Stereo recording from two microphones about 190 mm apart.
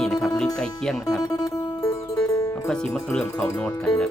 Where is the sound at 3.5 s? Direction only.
5° left (ahead or behind).